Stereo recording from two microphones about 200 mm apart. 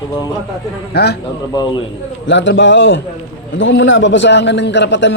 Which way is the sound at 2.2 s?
65° left (ahead or behind).